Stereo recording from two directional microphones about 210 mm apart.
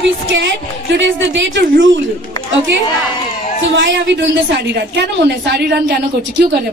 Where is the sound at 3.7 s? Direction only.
60° right (ahead or behind).